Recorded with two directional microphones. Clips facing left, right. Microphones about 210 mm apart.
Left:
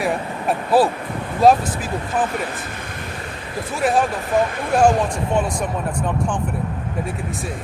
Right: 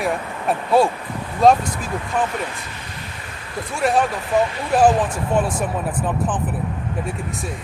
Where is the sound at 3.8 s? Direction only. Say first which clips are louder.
Even; centre (ahead or behind).